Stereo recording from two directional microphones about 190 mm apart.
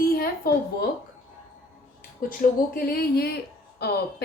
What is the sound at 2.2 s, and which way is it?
Speech, 50° left (ahead or behind).